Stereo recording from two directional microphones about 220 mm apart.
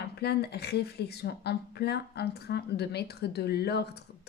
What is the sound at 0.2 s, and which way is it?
Speech, 50° left (ahead or behind).